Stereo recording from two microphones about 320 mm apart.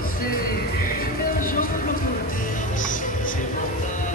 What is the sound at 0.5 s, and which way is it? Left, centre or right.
Music, left.